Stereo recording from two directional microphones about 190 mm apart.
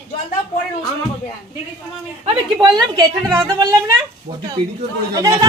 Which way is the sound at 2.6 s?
20° right (ahead or behind).